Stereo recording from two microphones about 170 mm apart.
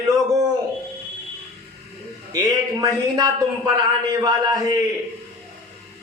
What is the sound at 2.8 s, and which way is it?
A man's voice, 25° right (ahead or behind).